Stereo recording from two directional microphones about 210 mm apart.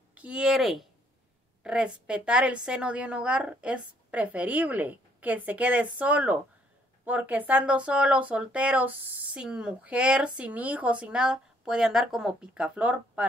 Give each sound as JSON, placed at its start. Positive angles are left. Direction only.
{"t": 0.1, "sound": "speech", "side_deg": -5}